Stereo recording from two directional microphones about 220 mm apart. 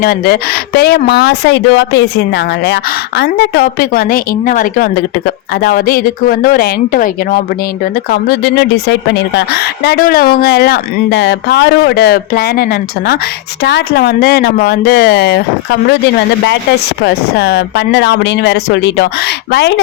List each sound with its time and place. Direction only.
0.0 s speech: 45° left (ahead or behind)
17.0 s speech: 50° left (ahead or behind)